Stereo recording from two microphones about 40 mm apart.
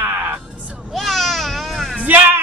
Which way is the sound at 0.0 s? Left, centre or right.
Right.